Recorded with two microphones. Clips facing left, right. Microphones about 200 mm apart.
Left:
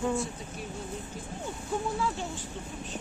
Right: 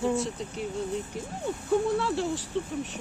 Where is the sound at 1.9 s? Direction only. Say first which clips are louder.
Right 4 dB; 75° right (ahead or behind).